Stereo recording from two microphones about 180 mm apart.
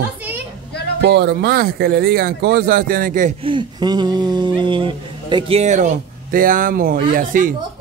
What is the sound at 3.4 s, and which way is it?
Speech, 25° right (ahead or behind).